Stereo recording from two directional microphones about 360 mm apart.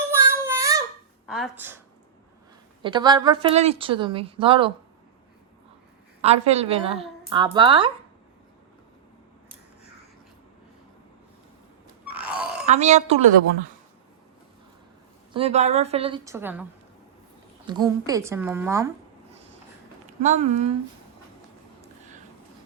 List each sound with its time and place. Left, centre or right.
0.1 s child singing: centre
1.3 s speech: centre
2.8 s a woman's voice: centre
6.2 s a woman's voice: centre
12.0 s grunt: centre
12.6 s a woman's voice: centre
15.3 s a woman's voice: centre
17.7 s a woman's voice: centre
20.2 s a woman's voice: centre